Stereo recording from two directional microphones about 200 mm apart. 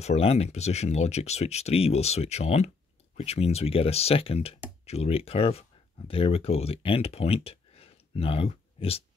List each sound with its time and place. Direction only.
0.0 s speech: 30° left (ahead or behind)